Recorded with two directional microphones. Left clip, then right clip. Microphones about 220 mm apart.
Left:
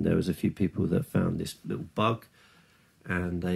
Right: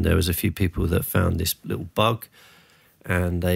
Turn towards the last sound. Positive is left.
turn(degrees=-40)  # may be behind; listen again after turning